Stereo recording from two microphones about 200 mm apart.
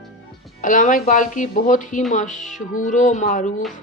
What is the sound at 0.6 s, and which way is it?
A woman's voice, 40° left (ahead or behind).